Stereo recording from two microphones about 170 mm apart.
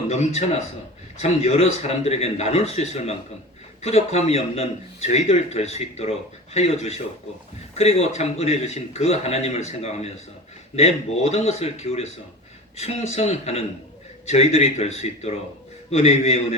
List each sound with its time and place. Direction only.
0.1 s a man's voice: 40° left (ahead or behind)